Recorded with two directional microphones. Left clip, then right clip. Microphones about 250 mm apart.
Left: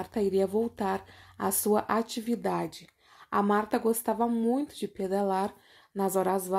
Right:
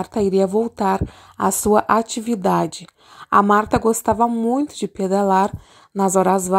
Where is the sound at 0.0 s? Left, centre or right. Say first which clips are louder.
Right 9 dB; right.